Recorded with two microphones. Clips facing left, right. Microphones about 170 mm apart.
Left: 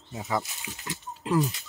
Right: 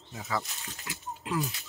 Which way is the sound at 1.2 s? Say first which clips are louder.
Left 7 dB; 35° left (ahead or behind).